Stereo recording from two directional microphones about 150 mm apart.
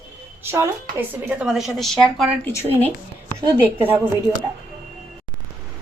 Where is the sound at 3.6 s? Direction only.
10° right (ahead or behind).